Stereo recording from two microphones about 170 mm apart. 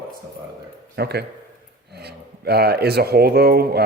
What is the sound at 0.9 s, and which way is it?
Speech, 70° right (ahead or behind).